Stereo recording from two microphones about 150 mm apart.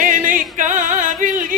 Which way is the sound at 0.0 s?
60° right (ahead or behind).